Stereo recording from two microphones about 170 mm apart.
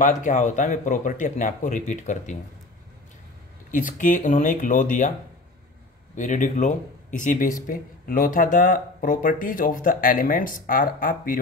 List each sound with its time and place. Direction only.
0.0 s speech: 45° left (ahead or behind)
3.7 s speech: 50° left (ahead or behind)
6.1 s speech: 50° left (ahead or behind)